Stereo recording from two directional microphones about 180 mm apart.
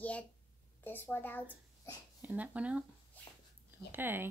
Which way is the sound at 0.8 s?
10° left (ahead or behind).